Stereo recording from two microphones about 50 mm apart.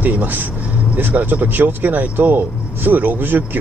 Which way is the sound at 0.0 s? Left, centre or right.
Right.